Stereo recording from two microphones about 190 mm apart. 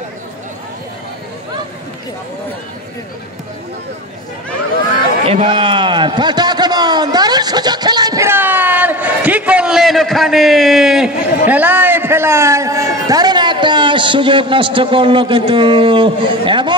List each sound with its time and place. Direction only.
5.2 s a man's voice: 30° right (ahead or behind)